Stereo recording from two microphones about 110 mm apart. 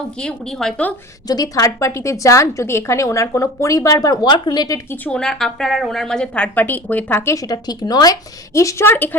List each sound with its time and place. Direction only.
0.2 s a woman's voice: 5° left (ahead or behind)
1.3 s a woman's voice: 35° left (ahead or behind)
4.9 s a woman's voice: 10° left (ahead or behind)
7.3 s a woman's voice: 40° left (ahead or behind); by 9.1 s 20° left (ahead or behind)